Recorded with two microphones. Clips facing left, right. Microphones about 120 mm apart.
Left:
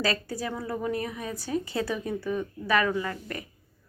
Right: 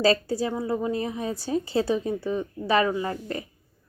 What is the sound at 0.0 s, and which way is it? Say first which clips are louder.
A woman's voice: right 7 dB; 30° right (ahead or behind).